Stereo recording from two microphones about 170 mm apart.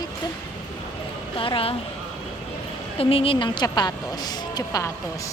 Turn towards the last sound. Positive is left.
turn(degrees=20)  # may be behind; listen again after turning